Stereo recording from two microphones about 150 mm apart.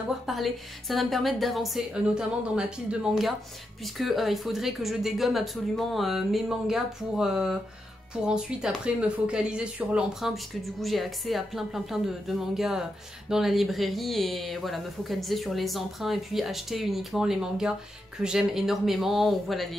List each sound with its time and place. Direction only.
0.3 s speech: centre (ahead or behind)